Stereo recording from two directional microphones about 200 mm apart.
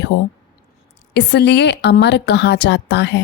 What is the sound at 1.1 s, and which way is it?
Speech, 55° left (ahead or behind).